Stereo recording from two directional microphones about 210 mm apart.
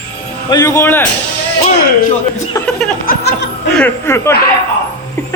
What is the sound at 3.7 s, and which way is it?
Speech, 10° left (ahead or behind).